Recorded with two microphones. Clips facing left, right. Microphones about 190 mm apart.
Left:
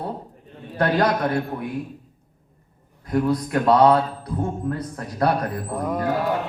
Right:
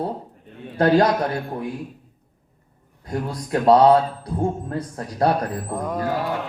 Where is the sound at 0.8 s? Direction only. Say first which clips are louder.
Right 4 dB; 25° right (ahead or behind).